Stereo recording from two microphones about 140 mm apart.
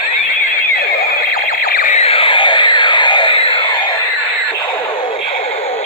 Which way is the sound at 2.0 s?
45° left (ahead or behind).